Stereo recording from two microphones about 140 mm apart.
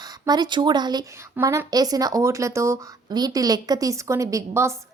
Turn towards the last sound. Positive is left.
turn(degrees=-20)  # may be behind; listen again after turning